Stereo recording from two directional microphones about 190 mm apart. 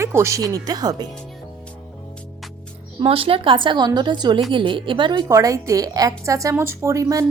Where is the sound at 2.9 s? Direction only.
30° right (ahead or behind).